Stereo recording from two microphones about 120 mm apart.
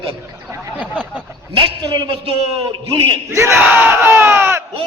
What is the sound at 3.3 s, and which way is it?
Speech, 20° right (ahead or behind).